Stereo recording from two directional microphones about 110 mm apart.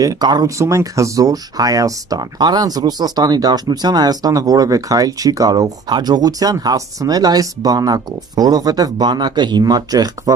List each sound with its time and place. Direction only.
0.0 s speech: 35° right (ahead or behind)
0.6 s speech: 30° right (ahead or behind)